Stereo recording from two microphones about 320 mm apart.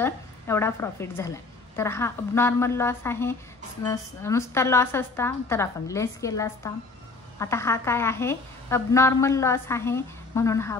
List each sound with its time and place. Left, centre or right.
0.0 s a woman's voice: centre